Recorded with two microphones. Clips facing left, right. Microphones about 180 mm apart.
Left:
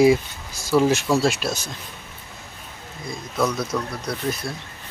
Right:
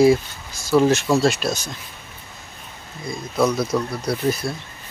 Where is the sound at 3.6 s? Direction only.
5° right (ahead or behind).